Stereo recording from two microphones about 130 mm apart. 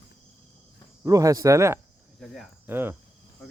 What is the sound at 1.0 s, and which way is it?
Speech, 25° right (ahead or behind).